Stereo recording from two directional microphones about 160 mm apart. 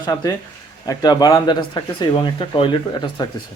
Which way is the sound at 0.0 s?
20° left (ahead or behind).